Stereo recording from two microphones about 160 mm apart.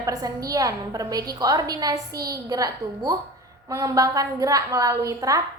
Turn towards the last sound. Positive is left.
turn(degrees=-20)  # may be behind; listen again after turning